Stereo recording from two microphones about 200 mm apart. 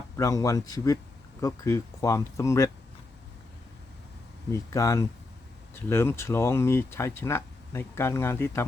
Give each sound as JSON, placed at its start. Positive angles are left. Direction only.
{"t": 0.2, "sound": "speech", "side_deg": 15}
{"t": 4.5, "sound": "speech", "side_deg": 15}